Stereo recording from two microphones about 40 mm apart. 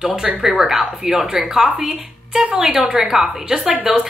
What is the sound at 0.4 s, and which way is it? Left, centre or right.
Speech, centre.